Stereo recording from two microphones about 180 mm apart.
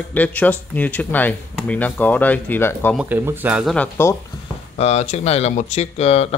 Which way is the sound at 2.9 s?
10° right (ahead or behind).